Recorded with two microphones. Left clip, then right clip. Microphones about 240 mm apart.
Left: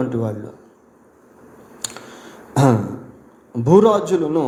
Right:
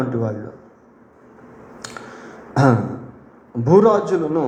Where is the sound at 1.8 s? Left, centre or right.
Left.